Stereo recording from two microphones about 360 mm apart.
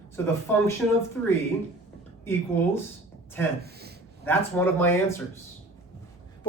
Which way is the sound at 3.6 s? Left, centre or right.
Right.